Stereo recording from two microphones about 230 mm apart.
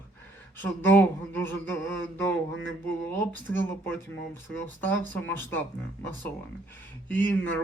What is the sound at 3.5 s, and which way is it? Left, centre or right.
Speech, centre.